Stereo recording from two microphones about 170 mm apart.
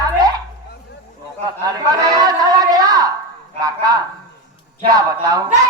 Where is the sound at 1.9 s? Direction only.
20° right (ahead or behind).